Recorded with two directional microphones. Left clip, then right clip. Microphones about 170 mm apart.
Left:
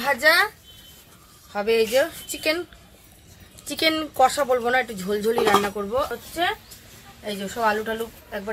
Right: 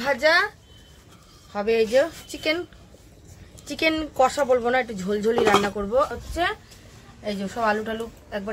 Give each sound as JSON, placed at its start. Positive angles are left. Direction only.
{"t": 0.0, "sound": "speech", "side_deg": -10}
{"t": 1.5, "sound": "speech", "side_deg": -15}
{"t": 3.6, "sound": "a woman's voice", "side_deg": -10}